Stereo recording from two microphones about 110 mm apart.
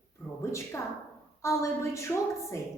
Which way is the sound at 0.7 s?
25° left (ahead or behind).